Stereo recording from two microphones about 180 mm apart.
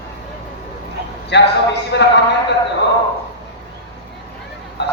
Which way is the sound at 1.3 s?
75° left (ahead or behind).